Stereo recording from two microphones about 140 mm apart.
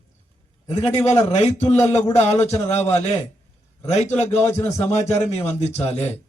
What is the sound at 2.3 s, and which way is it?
Speech, 50° left (ahead or behind).